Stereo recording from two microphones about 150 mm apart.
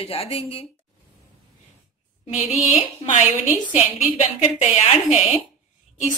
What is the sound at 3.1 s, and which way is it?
Speech, 55° left (ahead or behind).